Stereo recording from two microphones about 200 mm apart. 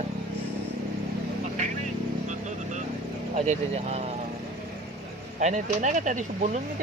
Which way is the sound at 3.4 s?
30° right (ahead or behind).